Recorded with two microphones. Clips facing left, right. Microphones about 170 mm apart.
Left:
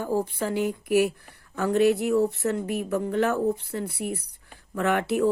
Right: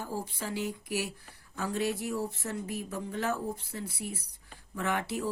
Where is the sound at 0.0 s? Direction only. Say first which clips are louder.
Left 10 dB; 55° left (ahead or behind).